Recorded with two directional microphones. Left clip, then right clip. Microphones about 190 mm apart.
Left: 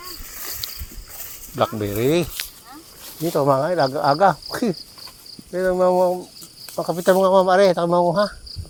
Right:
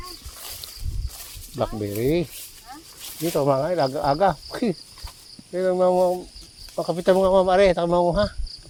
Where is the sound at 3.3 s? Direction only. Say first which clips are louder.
Left 3 dB; 15° left (ahead or behind).